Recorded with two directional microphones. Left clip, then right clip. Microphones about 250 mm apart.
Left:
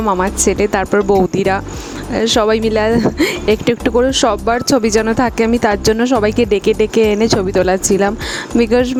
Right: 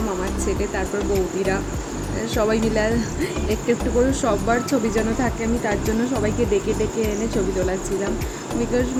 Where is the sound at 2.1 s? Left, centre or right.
Left.